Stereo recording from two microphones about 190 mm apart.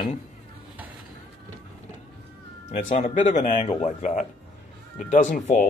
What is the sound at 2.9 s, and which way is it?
Speech, 40° left (ahead or behind).